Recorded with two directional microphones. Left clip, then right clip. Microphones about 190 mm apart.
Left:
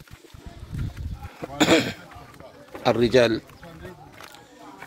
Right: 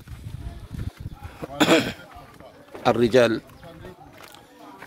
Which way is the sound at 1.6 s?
5° right (ahead or behind).